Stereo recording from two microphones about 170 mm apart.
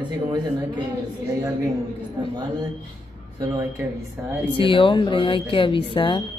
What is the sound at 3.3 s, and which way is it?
Speech, 20° right (ahead or behind).